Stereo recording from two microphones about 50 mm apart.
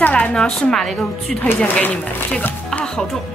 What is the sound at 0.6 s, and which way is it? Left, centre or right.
Speech, centre.